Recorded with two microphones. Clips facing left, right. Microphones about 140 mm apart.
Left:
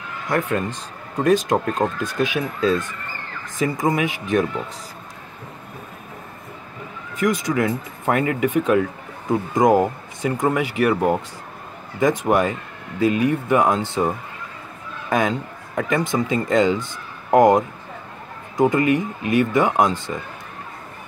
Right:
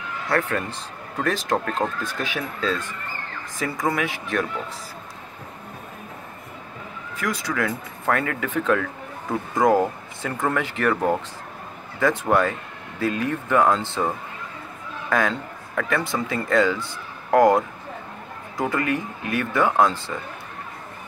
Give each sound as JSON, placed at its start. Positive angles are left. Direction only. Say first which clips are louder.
{"t": 0.3, "sound": "speech", "louder": "left 2 dB", "side_deg": 20}
{"t": 3.8, "sound": "speech", "louder": "left 1 dB", "side_deg": 20}
{"t": 7.2, "sound": "speech", "louder": "left 6 dB", "side_deg": 20}